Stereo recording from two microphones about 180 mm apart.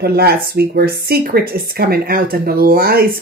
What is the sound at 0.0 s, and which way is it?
Speech, 60° right (ahead or behind).